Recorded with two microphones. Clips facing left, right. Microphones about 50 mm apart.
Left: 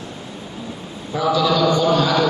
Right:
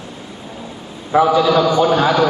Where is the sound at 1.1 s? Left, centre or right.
Right.